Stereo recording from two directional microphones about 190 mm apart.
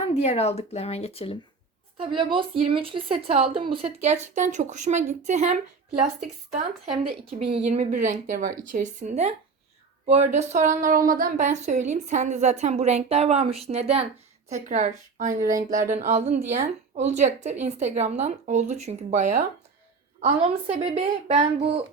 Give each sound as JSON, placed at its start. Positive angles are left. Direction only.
{"t": 0.1, "sound": "speech", "side_deg": 35}
{"t": 2.0, "sound": "a woman's voice", "side_deg": -25}